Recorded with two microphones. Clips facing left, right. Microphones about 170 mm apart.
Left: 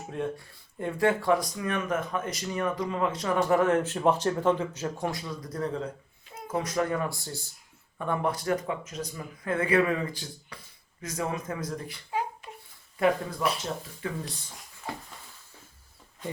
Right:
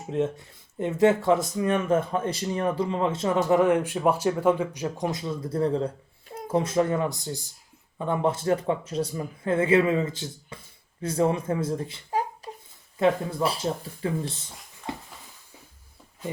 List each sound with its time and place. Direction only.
0.1 s speech: 20° right (ahead or behind)
12.1 s babbling: 35° right (ahead or behind)
13.0 s speech: 30° right (ahead or behind)
14.9 s a sound: 20° right (ahead or behind)